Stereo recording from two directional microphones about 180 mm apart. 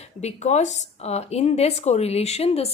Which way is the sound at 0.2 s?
40° left (ahead or behind).